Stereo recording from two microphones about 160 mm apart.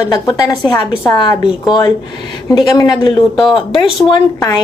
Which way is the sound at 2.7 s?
25° left (ahead or behind).